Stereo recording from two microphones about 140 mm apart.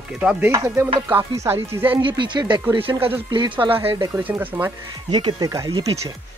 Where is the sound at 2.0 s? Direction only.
35° right (ahead or behind).